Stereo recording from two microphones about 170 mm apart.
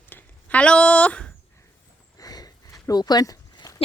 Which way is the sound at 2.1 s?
20° left (ahead or behind).